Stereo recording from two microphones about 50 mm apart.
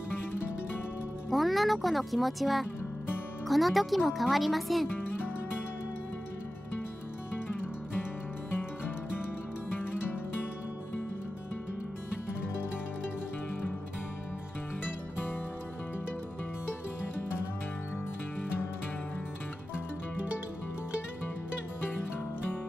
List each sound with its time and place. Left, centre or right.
1.3 s speech: centre
4.9 s music: left
8.5 s music: left